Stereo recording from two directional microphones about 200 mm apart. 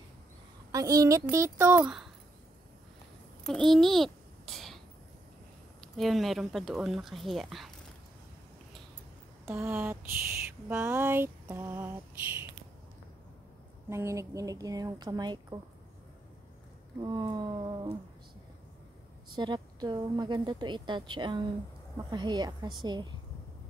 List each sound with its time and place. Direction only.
0.7 s speech: 15° right (ahead or behind)
3.4 s a sound: centre (ahead or behind)
5.9 s speech: centre (ahead or behind)
9.5 s a sound: 10° right (ahead or behind)
13.8 s speech: 15° right (ahead or behind)
17.0 s a woman's voice: 20° right (ahead or behind)
19.3 s a woman's voice: 20° right (ahead or behind)